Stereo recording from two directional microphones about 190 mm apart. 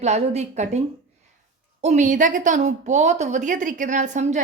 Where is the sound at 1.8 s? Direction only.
40° right (ahead or behind).